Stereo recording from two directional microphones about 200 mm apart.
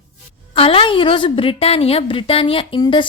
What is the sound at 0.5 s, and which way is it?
A woman's voice, 30° left (ahead or behind).